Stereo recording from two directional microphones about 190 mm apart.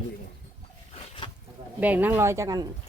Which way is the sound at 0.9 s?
30° left (ahead or behind).